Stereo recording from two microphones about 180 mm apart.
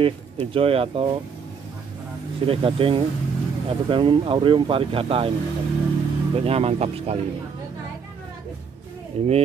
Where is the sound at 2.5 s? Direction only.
30° right (ahead or behind).